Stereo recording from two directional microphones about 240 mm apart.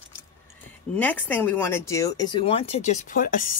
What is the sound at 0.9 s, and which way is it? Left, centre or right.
Speech, centre.